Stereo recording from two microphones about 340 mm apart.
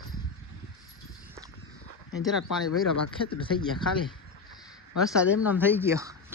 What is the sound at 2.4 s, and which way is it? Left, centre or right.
Speech, left.